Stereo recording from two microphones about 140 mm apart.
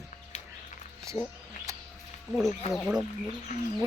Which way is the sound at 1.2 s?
20° left (ahead or behind).